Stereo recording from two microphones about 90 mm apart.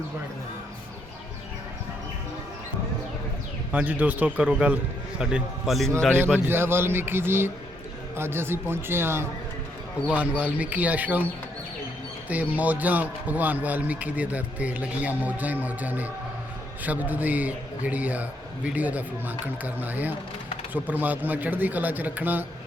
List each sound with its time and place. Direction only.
3.7 s speech: 20° right (ahead or behind); by 5.9 s centre (ahead or behind)
6.5 s speech: 25° right (ahead or behind)
10.1 s speech: 15° right (ahead or behind)
12.3 s speech: 15° right (ahead or behind)